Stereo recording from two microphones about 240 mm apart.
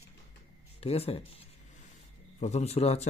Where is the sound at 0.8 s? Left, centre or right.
Left.